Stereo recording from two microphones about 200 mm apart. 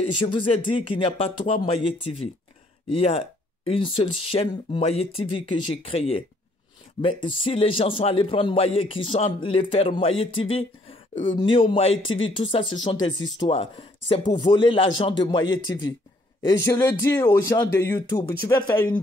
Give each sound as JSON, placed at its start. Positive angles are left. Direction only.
{"t": 0.0, "sound": "a man's voice", "side_deg": 25}
{"t": 16.6, "sound": "speech", "side_deg": 10}